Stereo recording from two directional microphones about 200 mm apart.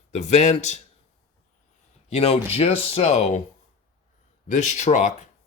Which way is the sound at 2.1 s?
30° left (ahead or behind).